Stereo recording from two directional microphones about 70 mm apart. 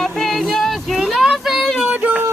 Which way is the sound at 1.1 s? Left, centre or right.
Centre.